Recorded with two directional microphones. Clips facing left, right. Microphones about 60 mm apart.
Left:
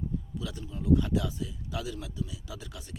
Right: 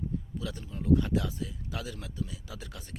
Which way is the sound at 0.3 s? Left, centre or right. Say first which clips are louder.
Even; right.